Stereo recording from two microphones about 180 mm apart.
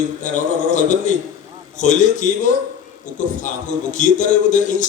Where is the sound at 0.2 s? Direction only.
40° left (ahead or behind).